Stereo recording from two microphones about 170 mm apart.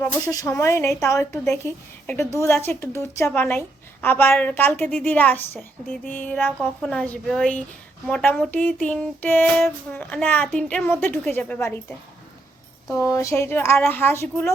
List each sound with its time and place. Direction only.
0.0 s speech: 15° left (ahead or behind)